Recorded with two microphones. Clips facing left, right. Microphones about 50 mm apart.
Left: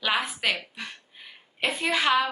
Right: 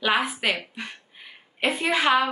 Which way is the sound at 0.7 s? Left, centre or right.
Centre.